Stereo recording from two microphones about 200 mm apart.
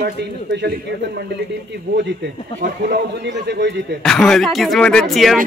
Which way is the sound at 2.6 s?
55° right (ahead or behind).